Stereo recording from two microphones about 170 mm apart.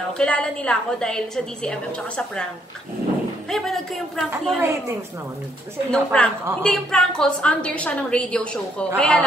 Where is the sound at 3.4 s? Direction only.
Centre (ahead or behind).